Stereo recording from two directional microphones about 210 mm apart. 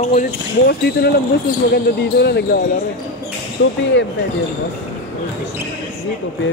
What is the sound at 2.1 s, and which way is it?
Speech, 50° left (ahead or behind).